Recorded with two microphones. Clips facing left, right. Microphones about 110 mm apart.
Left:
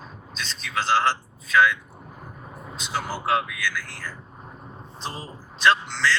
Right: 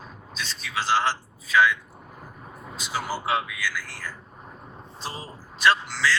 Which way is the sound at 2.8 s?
5° right (ahead or behind).